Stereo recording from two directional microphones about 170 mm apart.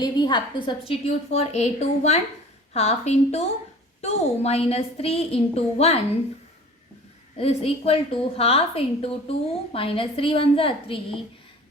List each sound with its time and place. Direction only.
0.0 s a woman's voice: 25° left (ahead or behind)
7.3 s a woman's voice: 35° left (ahead or behind)